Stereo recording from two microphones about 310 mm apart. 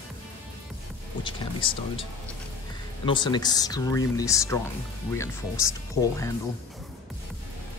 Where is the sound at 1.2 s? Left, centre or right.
Centre.